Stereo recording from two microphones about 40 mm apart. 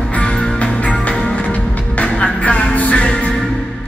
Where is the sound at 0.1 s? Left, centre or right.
Left.